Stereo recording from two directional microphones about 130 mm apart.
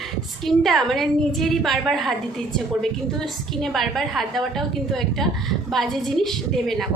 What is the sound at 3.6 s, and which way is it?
A woman's voice, centre (ahead or behind).